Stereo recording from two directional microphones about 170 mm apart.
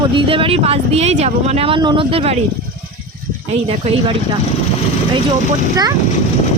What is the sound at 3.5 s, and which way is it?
Speech, 40° right (ahead or behind).